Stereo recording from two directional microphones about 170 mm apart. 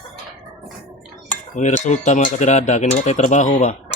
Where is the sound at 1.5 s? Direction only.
45° left (ahead or behind).